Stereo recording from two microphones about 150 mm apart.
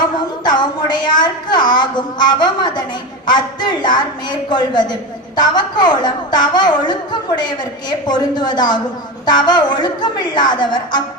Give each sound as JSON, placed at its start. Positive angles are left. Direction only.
{"t": 0.4, "sound": "a woman's voice", "side_deg": 30}